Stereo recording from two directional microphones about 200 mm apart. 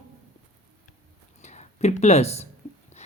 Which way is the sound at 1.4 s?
35° left (ahead or behind).